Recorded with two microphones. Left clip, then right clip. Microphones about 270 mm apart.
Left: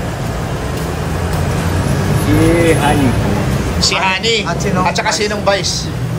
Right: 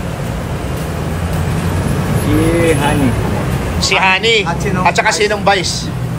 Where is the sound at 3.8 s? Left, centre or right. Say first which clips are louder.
Right 3 dB; right.